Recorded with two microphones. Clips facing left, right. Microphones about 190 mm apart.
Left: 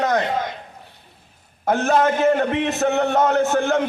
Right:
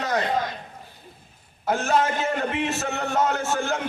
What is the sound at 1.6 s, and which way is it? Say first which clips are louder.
A man's voice: left 5 dB; 60° left (ahead or behind).